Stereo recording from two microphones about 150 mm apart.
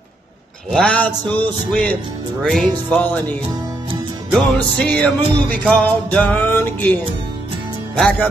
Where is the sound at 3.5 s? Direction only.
25° right (ahead or behind).